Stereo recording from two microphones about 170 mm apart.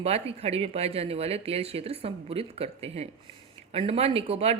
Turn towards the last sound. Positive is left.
turn(degrees=-35)  # may be behind; listen again after turning